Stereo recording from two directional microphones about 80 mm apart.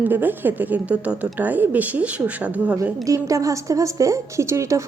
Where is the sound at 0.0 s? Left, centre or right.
Right.